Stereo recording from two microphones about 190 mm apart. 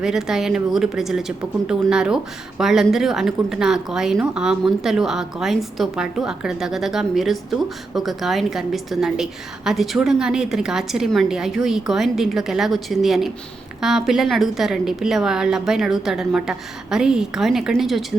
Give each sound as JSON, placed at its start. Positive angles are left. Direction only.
{"t": 0.0, "sound": "speech", "side_deg": -5}